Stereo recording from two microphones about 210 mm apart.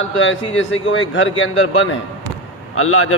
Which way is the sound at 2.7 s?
80° left.